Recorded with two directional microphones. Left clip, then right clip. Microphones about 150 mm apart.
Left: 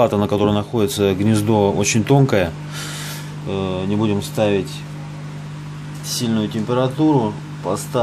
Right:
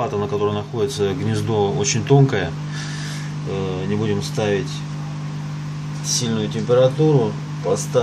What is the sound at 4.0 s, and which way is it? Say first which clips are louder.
Speech: left 5 dB; 55° left (ahead or behind).